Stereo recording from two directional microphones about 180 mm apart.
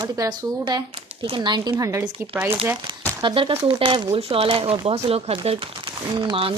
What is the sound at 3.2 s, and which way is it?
Speech, 30° right (ahead or behind).